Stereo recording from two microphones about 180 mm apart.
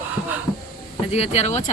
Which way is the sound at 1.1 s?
35° left (ahead or behind).